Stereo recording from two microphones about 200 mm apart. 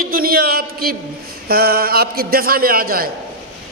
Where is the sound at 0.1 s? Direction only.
45° right (ahead or behind).